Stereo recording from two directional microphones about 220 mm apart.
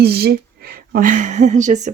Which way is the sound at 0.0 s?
45° right (ahead or behind).